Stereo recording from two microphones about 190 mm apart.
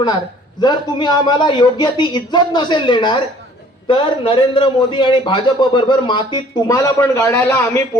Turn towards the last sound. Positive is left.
turn(degrees=10)  # may be behind; listen again after turning